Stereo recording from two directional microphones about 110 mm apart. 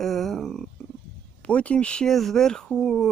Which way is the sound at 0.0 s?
Centre (ahead or behind).